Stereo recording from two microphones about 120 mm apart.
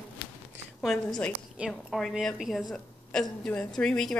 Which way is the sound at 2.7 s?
5° left (ahead or behind).